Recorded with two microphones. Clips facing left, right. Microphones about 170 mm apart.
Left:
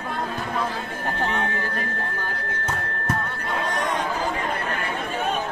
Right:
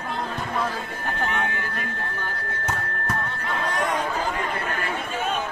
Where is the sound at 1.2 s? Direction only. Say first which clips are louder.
Left 1 dB; 35° left (ahead or behind).